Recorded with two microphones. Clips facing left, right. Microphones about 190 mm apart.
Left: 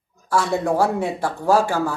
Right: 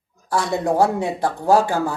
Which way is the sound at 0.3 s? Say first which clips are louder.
Even; 15° right (ahead or behind).